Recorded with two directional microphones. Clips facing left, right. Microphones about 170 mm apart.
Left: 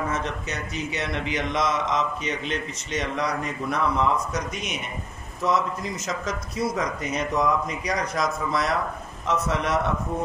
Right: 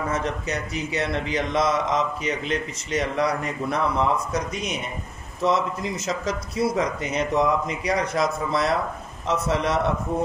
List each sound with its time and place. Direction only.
0.2 s a man's voice: 35° right (ahead or behind)